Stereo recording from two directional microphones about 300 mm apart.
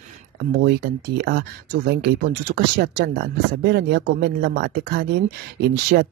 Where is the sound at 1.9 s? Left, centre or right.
Right.